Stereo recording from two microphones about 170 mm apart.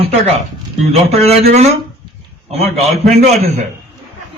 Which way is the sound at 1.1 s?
40° right (ahead or behind).